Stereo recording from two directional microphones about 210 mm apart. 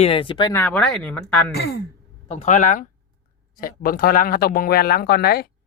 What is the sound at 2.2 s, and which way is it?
Speech, 35° left (ahead or behind).